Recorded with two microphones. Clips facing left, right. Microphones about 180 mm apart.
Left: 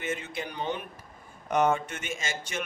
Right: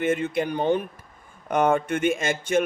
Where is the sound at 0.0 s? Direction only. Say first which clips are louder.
Right 10 dB; 55° right (ahead or behind).